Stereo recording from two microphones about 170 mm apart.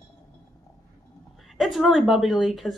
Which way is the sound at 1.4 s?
Centre (ahead or behind).